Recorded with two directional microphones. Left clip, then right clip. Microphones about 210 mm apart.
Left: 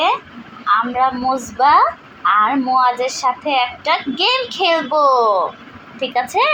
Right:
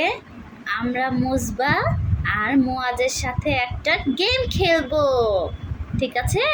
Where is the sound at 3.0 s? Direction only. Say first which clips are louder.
Left 5 dB; 35° right (ahead or behind).